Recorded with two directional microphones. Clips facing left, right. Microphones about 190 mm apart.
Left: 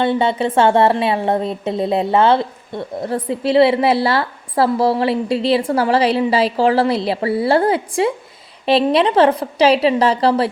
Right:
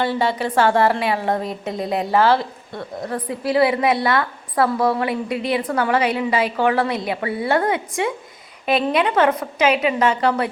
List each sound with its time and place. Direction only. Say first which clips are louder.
0.0 s a woman's voice: left 4 dB; 25° left (ahead or behind)